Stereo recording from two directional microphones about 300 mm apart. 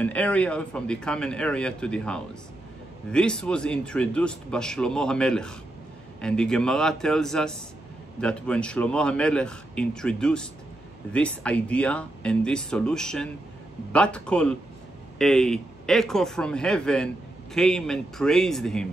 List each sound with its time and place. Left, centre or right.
0.0 s speech: centre